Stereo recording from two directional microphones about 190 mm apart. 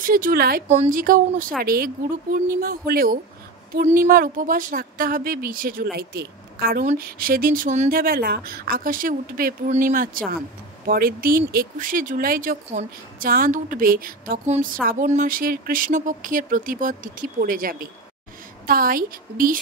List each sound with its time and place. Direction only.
0.0 s speech: 45° right (ahead or behind)
0.7 s speech: 40° right (ahead or behind)